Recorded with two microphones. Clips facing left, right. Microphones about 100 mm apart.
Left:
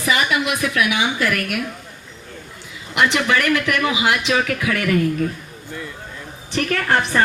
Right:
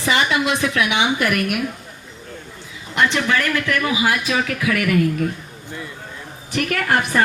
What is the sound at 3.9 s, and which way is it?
Speech, 75° left (ahead or behind).